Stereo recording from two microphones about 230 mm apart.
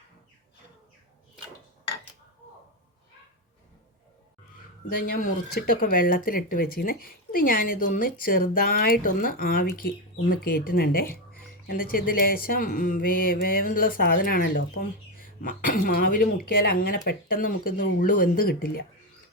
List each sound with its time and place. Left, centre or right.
5.0 s speech: left